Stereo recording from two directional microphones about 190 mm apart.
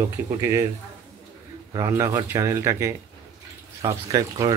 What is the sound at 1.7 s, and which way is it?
Speech, 15° right (ahead or behind).